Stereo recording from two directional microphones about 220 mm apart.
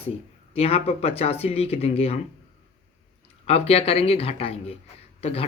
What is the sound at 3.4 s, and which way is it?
Speech, 25° left (ahead or behind).